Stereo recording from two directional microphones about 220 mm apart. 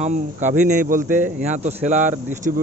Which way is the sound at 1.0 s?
10° right (ahead or behind).